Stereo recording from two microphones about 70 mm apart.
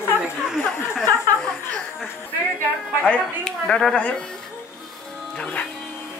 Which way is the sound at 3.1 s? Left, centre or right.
Centre.